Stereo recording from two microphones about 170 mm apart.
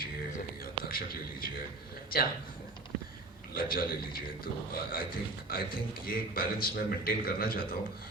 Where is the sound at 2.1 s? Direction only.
60° left (ahead or behind).